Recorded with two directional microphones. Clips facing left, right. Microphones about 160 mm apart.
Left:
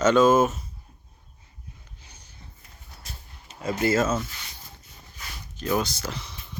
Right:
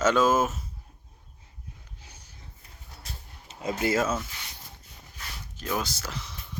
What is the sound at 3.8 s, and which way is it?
Speech, 10° right (ahead or behind).